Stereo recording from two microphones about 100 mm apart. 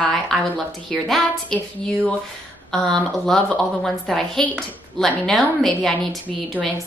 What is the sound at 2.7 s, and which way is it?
A woman's voice, 5° left (ahead or behind).